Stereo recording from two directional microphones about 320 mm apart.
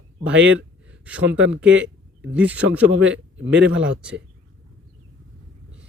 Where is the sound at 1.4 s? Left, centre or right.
Right.